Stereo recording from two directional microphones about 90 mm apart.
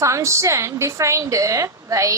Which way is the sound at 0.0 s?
35° right (ahead or behind).